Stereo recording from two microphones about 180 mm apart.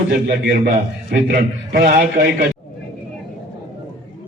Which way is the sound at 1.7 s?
50° right (ahead or behind).